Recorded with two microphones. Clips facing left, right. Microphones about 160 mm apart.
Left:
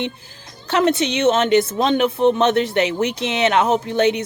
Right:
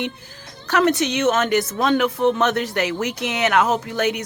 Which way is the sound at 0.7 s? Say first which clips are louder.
Left 1 dB; 25° left (ahead or behind).